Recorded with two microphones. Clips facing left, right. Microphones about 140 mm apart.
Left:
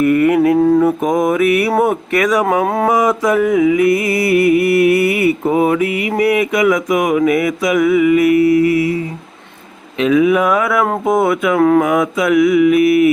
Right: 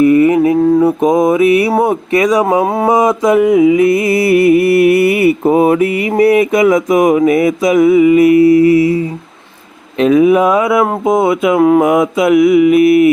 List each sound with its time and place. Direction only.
0.0 s mantra: 15° right (ahead or behind)
0.3 s mantra: centre (ahead or behind)
0.9 s mantra: 30° right (ahead or behind)
10.0 s mantra: 35° right (ahead or behind)